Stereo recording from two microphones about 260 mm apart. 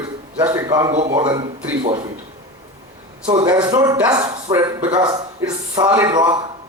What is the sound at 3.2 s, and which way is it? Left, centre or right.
A man's voice, centre.